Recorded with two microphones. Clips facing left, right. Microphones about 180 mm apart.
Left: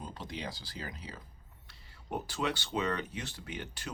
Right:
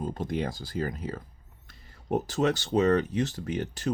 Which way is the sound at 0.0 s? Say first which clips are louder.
Right 11 dB; 50° right (ahead or behind).